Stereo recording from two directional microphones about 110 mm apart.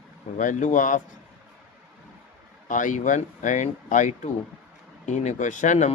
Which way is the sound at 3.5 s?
90° left.